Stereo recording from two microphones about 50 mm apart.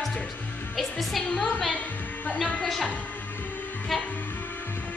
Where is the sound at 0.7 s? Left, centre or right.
Centre.